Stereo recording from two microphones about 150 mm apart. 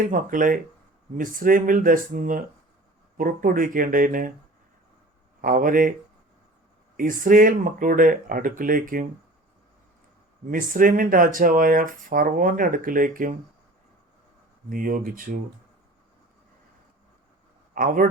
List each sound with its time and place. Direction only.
0.0 s speech: 60° right (ahead or behind)
5.4 s speech: 65° right (ahead or behind)
6.9 s speech: 65° right (ahead or behind)
10.5 s speech: 65° right (ahead or behind)
14.7 s speech: 70° right (ahead or behind)
17.7 s speech: 70° right (ahead or behind)